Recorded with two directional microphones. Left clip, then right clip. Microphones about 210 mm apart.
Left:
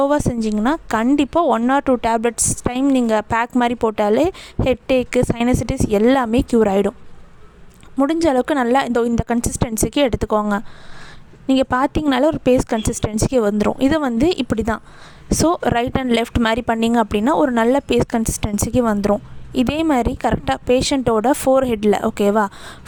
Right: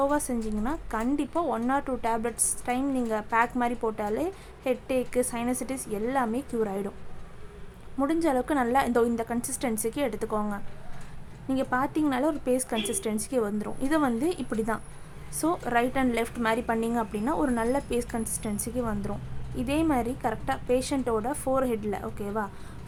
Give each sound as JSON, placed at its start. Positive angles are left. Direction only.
{"t": 0.0, "sound": "a woman's voice", "side_deg": 40}
{"t": 7.9, "sound": "a woman's voice", "side_deg": 35}